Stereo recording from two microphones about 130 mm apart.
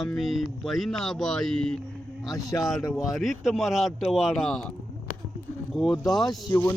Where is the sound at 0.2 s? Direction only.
Centre (ahead or behind).